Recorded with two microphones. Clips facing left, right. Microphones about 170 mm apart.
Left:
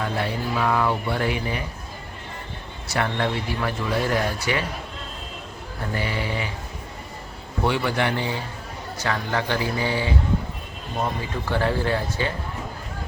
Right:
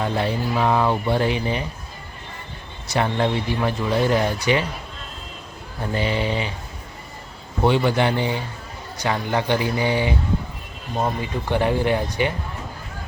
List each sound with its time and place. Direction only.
0.0 s speech: 25° right (ahead or behind)
2.8 s speech: 20° right (ahead or behind)
5.9 s speech: 20° right (ahead or behind)
7.6 s speech: 25° right (ahead or behind)